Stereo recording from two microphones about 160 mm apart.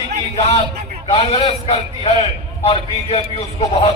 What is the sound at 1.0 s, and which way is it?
A man's voice, 40° left (ahead or behind).